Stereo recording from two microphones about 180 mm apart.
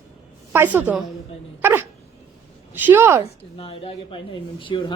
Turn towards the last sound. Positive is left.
turn(degrees=25)  # may be behind; listen again after turning